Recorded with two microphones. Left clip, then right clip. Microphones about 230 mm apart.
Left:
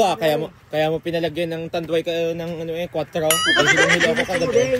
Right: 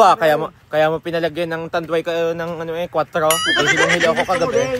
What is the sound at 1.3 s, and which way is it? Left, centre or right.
Speech, right.